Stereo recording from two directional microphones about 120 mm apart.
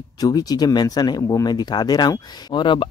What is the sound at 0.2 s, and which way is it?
Speech, 35° left (ahead or behind).